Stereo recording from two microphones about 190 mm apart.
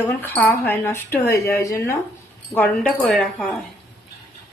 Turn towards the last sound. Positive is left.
turn(degrees=5)  # may be behind; listen again after turning